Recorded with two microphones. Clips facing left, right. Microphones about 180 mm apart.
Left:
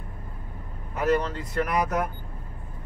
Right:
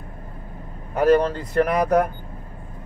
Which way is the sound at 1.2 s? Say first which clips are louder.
Right 8 dB; 55° right (ahead or behind).